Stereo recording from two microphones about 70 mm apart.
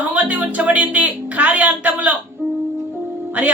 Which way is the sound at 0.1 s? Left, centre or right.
Centre.